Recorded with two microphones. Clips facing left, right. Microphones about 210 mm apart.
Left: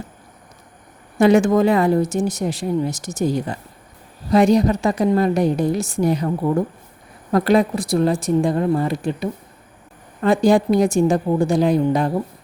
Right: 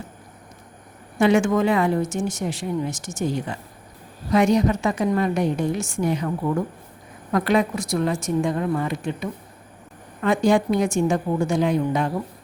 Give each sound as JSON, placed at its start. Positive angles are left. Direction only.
{"t": 1.2, "sound": "speech", "side_deg": 40}